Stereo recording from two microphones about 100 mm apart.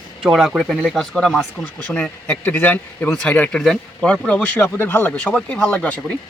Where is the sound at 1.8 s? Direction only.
15° left (ahead or behind).